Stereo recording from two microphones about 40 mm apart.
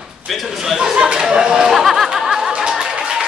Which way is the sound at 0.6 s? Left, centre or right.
Centre.